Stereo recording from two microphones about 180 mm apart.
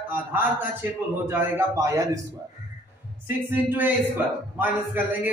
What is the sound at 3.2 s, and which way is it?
A man's voice, 10° right (ahead or behind).